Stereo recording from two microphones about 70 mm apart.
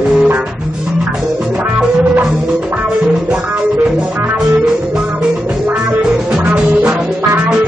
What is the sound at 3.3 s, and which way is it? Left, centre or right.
Music, centre.